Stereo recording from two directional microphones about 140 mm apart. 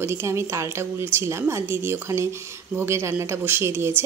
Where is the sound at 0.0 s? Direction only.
20° right (ahead or behind).